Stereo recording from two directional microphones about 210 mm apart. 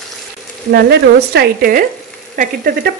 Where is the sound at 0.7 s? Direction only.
50° right (ahead or behind).